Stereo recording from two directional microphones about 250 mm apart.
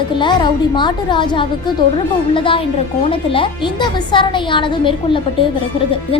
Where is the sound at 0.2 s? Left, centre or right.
Centre.